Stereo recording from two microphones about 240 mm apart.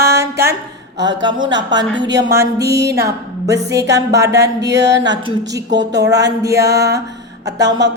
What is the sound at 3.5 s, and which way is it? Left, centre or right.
Speech, centre.